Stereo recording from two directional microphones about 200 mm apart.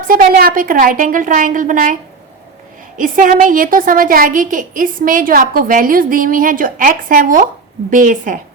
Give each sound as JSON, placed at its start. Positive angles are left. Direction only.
{"t": 0.1, "sound": "a woman's voice", "side_deg": -45}
{"t": 3.0, "sound": "a woman's voice", "side_deg": -40}